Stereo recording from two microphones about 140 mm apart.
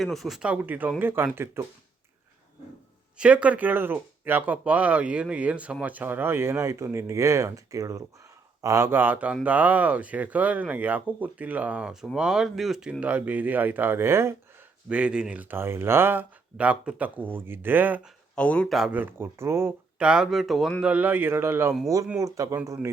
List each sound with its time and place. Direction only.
0.0 s speech: centre (ahead or behind); by 1.6 s 15° right (ahead or behind)
3.2 s speech: 10° right (ahead or behind)
18.3 s speech: 10° left (ahead or behind)
18.8 s speech: 10° right (ahead or behind)
20.0 s speech: 5° right (ahead or behind)